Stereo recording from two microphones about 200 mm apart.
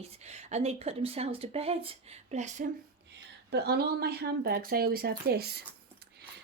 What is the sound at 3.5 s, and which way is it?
Speech, 55° right (ahead or behind).